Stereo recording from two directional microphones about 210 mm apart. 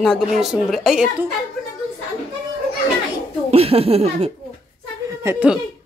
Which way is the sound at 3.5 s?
30° right (ahead or behind).